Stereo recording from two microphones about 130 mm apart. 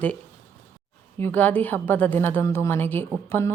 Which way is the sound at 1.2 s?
15° left (ahead or behind).